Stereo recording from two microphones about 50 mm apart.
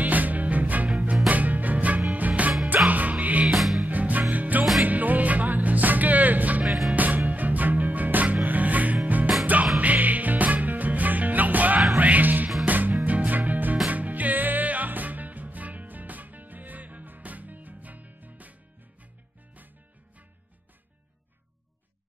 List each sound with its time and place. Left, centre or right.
0.0 s music: right
3.4 s music: centre
3.8 s music: right
6.6 s music: centre
6.9 s music: right